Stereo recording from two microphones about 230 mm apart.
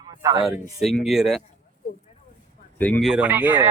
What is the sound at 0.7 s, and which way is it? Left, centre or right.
Speech, centre.